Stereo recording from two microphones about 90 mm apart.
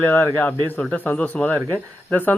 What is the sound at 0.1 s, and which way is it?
A man's voice, 20° left (ahead or behind).